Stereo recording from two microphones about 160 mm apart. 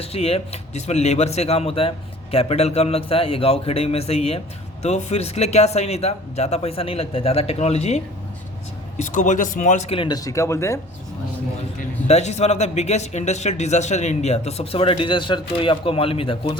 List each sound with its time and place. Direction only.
0.0 s speech: 40° left (ahead or behind); by 10.8 s 20° left (ahead or behind)
12.0 s speech: 45° left (ahead or behind)